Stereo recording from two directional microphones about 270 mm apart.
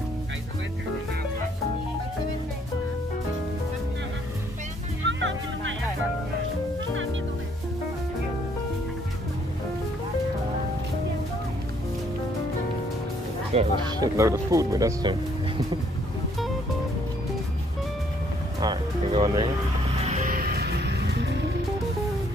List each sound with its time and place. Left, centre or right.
5.0 s music: right
13.5 s speech: centre
18.6 s music: centre; by 21.3 s right